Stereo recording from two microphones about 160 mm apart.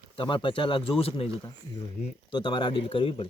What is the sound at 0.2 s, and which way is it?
Speech, 30° left (ahead or behind).